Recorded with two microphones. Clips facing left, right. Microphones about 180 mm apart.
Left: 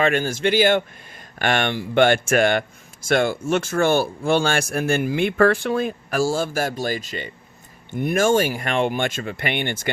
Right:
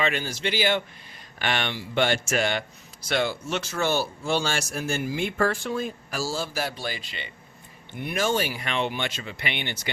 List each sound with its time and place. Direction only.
0.0 s speech: 50° left (ahead or behind)